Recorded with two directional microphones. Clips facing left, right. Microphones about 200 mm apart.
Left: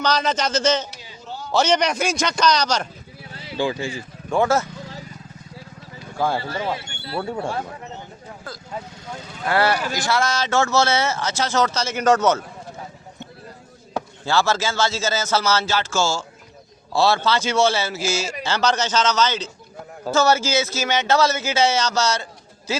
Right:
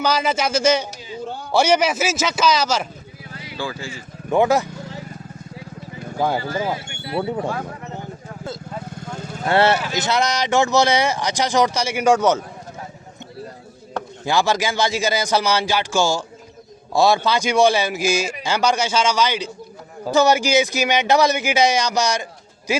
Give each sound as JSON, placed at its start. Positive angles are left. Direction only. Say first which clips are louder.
{"t": 0.0, "sound": "speech", "louder": "right 1 dB", "side_deg": -10}
{"t": 3.3, "sound": "vehicle", "louder": "left 5 dB", "side_deg": 25}
{"t": 4.3, "sound": "speech", "louder": "right 2 dB", "side_deg": -15}
{"t": 6.1, "sound": "speech", "louder": "right 2 dB", "side_deg": -20}
{"t": 9.0, "sound": "vehicle", "louder": "right 4 dB", "side_deg": -50}
{"t": 9.4, "sound": "speech", "louder": "right 3 dB", "side_deg": -25}
{"t": 14.3, "sound": "speech", "louder": "right 1 dB", "side_deg": -15}